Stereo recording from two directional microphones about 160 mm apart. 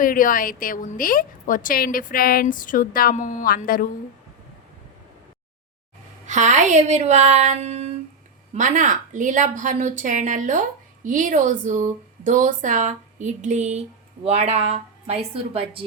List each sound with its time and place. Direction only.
0.0 s a woman's voice: 60° left (ahead or behind)
6.2 s a woman's voice: 50° right (ahead or behind)
8.5 s a woman's voice: 50° right (ahead or behind); by 15.8 s 35° right (ahead or behind)